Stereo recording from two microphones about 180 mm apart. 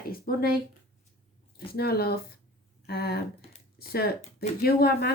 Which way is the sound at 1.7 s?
60° left (ahead or behind).